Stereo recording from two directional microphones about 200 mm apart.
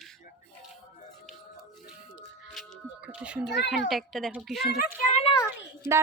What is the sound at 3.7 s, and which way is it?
Speech, centre (ahead or behind).